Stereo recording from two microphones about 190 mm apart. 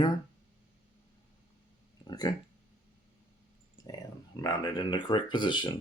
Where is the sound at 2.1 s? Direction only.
20° left (ahead or behind).